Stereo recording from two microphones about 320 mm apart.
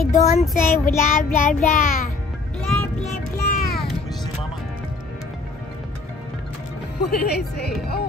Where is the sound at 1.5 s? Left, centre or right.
Left.